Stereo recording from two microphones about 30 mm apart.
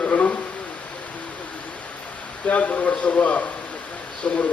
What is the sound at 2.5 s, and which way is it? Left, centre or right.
Speech, left.